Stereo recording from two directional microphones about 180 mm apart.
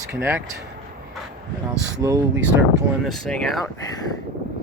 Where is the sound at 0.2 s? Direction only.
15° right (ahead or behind).